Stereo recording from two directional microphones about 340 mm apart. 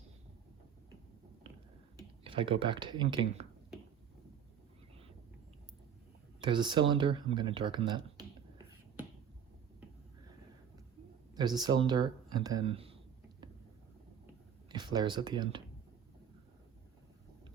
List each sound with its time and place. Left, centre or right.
2.2 s speech: centre
6.4 s speech: centre
11.3 s speech: centre
14.7 s speech: centre